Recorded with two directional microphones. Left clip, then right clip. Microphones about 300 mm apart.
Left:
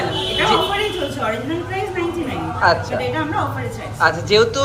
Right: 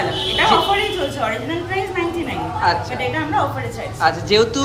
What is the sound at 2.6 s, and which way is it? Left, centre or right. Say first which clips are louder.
A woman's voice: left 3 dB; centre.